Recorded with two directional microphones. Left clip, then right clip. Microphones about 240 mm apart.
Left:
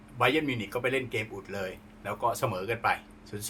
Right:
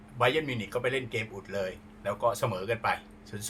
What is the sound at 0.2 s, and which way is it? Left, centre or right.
Speech, centre.